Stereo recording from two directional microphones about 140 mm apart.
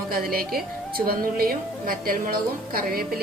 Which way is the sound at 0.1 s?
90° right.